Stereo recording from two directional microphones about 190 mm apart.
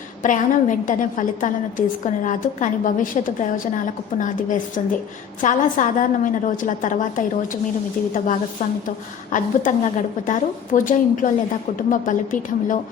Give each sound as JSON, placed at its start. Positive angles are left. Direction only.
{"t": 0.2, "sound": "a woman's voice", "side_deg": 40}
{"t": 9.3, "sound": "a woman's voice", "side_deg": 40}